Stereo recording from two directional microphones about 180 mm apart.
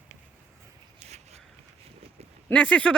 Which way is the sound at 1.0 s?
35° right (ahead or behind).